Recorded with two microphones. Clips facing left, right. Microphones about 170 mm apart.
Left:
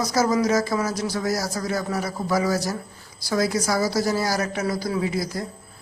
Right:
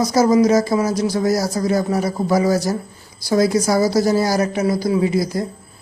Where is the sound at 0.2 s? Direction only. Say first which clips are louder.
Right 7 dB; 15° right (ahead or behind).